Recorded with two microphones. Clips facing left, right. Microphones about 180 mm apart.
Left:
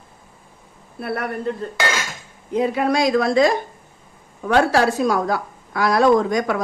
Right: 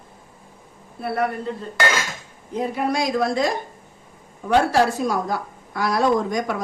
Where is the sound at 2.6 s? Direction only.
90° left.